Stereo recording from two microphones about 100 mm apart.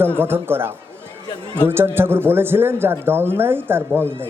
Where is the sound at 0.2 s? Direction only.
20° right (ahead or behind).